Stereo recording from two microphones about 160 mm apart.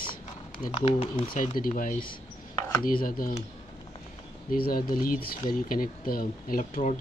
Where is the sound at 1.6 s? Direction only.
60° left (ahead or behind).